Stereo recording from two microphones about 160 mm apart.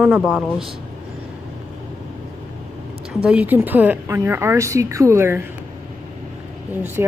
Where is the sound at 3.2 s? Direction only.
10° right (ahead or behind).